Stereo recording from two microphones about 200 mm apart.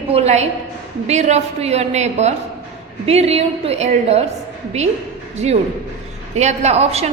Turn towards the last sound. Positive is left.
turn(degrees=-35)  # may be behind; listen again after turning